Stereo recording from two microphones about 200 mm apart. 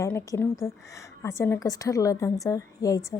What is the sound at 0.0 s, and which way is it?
A woman's voice, 15° left (ahead or behind).